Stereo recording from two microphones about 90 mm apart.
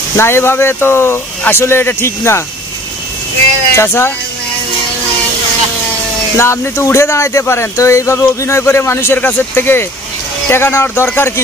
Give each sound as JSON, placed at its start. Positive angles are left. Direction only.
{"t": 0.1, "sound": "speech", "side_deg": 30}
{"t": 3.7, "sound": "speech", "side_deg": 30}
{"t": 6.3, "sound": "speech", "side_deg": 30}